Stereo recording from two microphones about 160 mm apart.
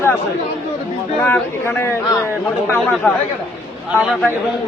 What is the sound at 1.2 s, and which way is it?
A man's voice, 10° left (ahead or behind).